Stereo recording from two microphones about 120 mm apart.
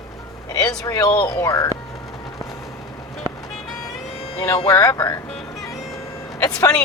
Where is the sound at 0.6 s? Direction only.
35° left (ahead or behind).